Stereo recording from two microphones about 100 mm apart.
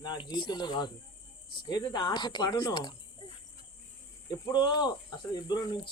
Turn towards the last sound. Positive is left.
turn(degrees=45)  # may be behind; listen again after turning